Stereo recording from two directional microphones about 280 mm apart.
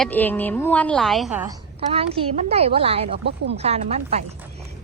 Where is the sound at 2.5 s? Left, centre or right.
Right.